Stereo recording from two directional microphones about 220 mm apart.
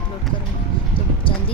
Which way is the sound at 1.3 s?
25° left (ahead or behind).